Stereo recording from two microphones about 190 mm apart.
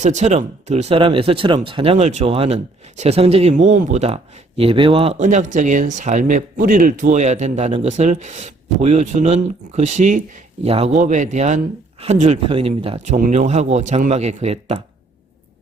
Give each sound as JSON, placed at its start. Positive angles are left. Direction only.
{"t": 0.0, "sound": "speech", "side_deg": -40}
{"t": 13.1, "sound": "speech", "side_deg": -45}